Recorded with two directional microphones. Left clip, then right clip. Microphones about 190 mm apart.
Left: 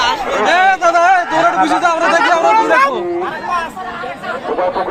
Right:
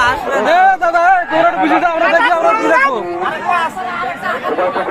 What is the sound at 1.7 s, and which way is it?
Speech, 35° right (ahead or behind).